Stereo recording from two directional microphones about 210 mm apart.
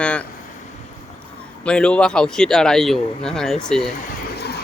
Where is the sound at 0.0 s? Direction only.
5° left (ahead or behind).